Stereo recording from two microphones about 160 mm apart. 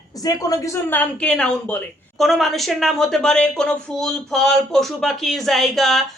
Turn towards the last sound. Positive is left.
turn(degrees=0)  # may be behind; listen again after turning